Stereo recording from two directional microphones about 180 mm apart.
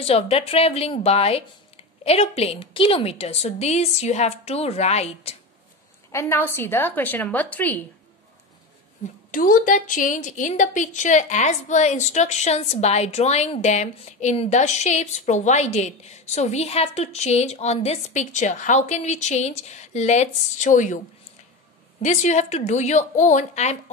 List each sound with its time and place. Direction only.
0.0 s a woman's voice: 35° left (ahead or behind)
6.1 s a woman's voice: 10° left (ahead or behind)
9.3 s a woman's voice: 50° left (ahead or behind)
22.0 s a woman's voice: 40° left (ahead or behind)